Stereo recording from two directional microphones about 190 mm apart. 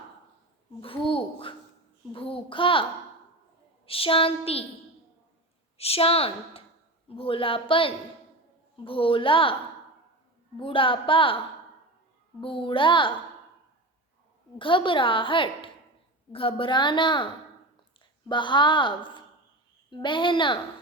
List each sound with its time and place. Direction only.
0.8 s a sound: 30° left (ahead or behind)
2.1 s a woman's voice: 30° left (ahead or behind)
3.8 s a woman's voice: 30° left (ahead or behind)
5.7 s a woman's voice: 30° left (ahead or behind)
10.6 s a woman's voice: 25° left (ahead or behind)
12.4 s a woman's voice: 25° left (ahead or behind)
14.6 s a woman's voice: 25° left (ahead or behind)
18.3 s a woman's voice: 25° left (ahead or behind)